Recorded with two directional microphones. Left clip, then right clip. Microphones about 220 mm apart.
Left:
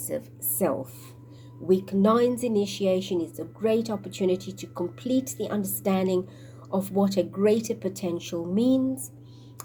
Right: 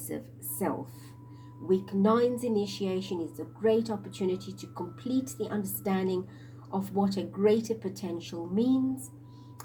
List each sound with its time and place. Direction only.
0.1 s a woman's voice: 30° left (ahead or behind)